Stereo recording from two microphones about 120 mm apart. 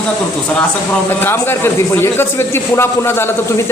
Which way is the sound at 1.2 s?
20° left (ahead or behind).